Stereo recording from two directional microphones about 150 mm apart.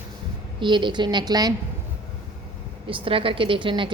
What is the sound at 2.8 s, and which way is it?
A woman's voice, 35° right (ahead or behind).